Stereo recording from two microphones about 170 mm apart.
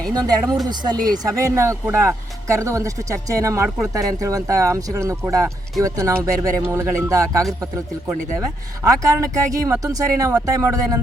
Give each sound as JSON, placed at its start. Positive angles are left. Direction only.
{"t": 0.1, "sound": "speech", "side_deg": -20}
{"t": 8.8, "sound": "speech", "side_deg": -20}